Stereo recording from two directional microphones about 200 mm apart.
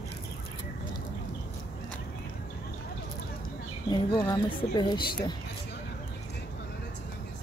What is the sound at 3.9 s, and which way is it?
Speech, 20° left (ahead or behind).